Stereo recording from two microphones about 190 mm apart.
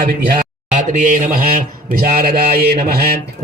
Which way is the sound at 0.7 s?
40° right (ahead or behind).